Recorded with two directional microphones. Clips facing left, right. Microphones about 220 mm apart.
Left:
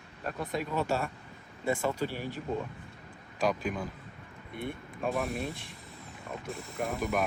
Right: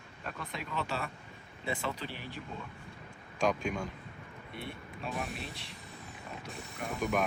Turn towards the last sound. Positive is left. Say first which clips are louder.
# left 2 dB
turn(degrees=0)  # may be behind; listen again after turning